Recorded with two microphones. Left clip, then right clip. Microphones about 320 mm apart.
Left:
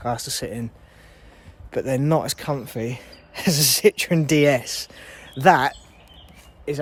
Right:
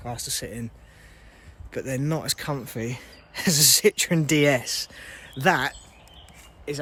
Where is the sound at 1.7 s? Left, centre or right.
Centre.